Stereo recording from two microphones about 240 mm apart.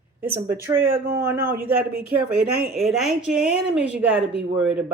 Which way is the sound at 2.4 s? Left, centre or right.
Right.